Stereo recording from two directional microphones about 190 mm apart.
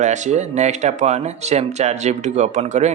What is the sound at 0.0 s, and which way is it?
A man's voice, 40° right (ahead or behind).